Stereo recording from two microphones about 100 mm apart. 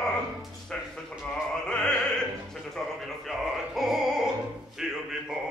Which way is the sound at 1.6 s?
10° left (ahead or behind).